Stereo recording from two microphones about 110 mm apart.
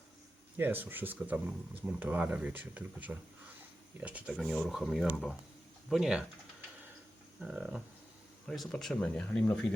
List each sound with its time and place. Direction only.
0.5 s speech: 20° right (ahead or behind)
4.4 s speech: centre (ahead or behind)
7.4 s speech: 10° right (ahead or behind)
8.4 s speech: 5° left (ahead or behind)